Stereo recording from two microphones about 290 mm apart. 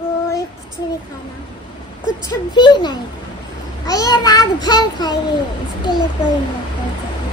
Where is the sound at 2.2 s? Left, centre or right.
Centre.